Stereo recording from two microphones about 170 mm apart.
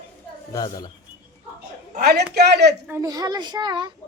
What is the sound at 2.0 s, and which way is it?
Speech, 70° right (ahead or behind).